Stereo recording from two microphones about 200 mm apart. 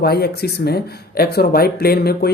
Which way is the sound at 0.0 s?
55° left (ahead or behind).